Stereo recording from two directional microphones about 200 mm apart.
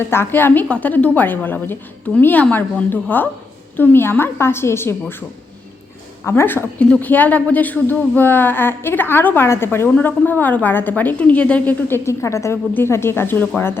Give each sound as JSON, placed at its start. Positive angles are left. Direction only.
{"t": 0.1, "sound": "a woman's voice", "side_deg": 10}
{"t": 6.2, "sound": "a woman's voice", "side_deg": 10}